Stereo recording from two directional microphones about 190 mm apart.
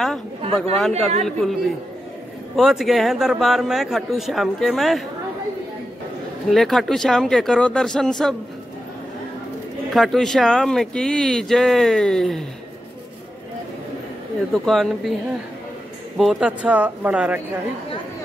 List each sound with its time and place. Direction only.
0.4 s speech: 30° right (ahead or behind)
0.7 s a man's voice: centre (ahead or behind)
6.5 s a man's voice: centre (ahead or behind)
9.9 s a man's voice: centre (ahead or behind)
14.5 s a man's voice: centre (ahead or behind)
16.2 s speech: centre (ahead or behind)